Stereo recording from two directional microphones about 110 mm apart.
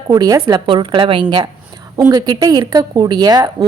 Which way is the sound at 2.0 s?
35° right (ahead or behind).